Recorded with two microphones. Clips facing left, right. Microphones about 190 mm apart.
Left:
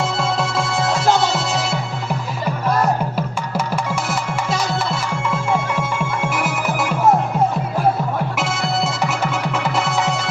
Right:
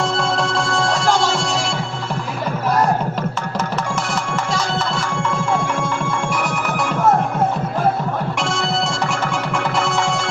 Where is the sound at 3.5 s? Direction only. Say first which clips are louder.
Left 3 dB; 10° left (ahead or behind).